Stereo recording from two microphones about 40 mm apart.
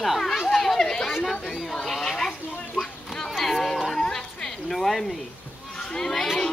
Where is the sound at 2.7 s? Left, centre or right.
Centre.